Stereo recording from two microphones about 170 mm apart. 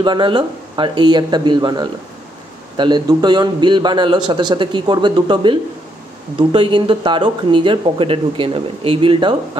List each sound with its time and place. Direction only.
0.0 s speech: 25° right (ahead or behind)